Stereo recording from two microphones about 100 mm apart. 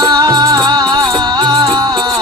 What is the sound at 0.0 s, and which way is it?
Music, 45° right (ahead or behind).